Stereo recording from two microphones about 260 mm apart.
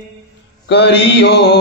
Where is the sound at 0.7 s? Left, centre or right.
Left.